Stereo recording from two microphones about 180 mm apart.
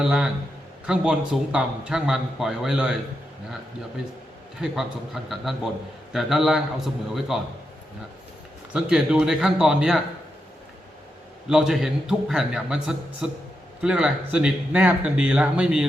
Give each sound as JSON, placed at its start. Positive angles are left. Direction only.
{"t": 0.0, "sound": "speech", "side_deg": -5}
{"t": 4.6, "sound": "speech", "side_deg": 0}
{"t": 8.7, "sound": "speech", "side_deg": -5}
{"t": 11.4, "sound": "speech", "side_deg": -5}